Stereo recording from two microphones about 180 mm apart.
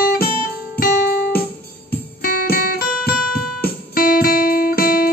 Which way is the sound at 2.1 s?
55° left (ahead or behind).